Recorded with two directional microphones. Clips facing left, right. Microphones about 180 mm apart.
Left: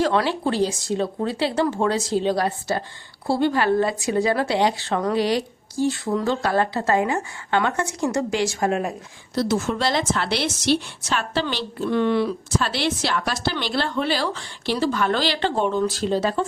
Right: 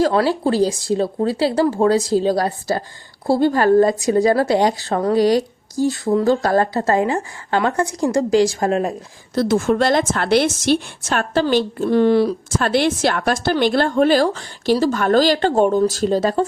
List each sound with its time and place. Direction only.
0.0 s speech: 35° right (ahead or behind)
9.3 s a woman's voice: 50° right (ahead or behind)
12.5 s a woman's voice: 50° right (ahead or behind)